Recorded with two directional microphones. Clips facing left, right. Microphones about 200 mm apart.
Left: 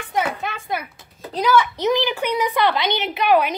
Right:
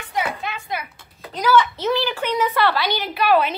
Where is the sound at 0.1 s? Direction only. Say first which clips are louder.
Left 2 dB; 50° left (ahead or behind).